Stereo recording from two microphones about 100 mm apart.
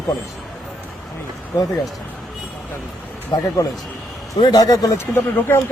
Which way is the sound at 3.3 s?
35° left (ahead or behind).